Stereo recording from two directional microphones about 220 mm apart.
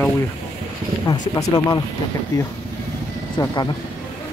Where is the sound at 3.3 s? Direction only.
20° left (ahead or behind).